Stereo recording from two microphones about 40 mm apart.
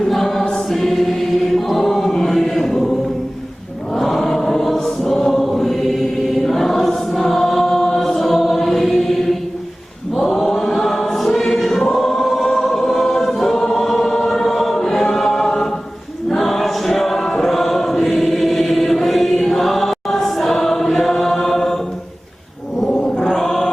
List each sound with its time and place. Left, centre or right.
0.1 s choir: centre
3.9 s choir: centre
22.8 s mantra: centre